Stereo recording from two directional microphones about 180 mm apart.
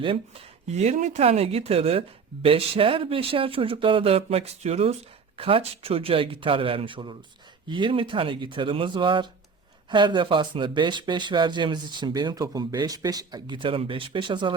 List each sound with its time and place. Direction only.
0.0 s speech: 30° right (ahead or behind)